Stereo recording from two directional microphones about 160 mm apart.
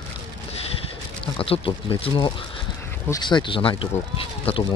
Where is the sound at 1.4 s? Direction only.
35° left (ahead or behind).